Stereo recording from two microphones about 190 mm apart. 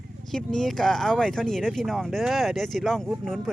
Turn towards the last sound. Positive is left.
turn(degrees=0)  # may be behind; listen again after turning